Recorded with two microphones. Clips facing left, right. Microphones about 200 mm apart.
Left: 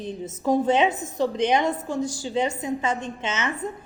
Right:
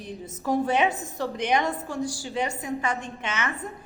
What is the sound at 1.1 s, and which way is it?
A woman's voice, 20° left (ahead or behind).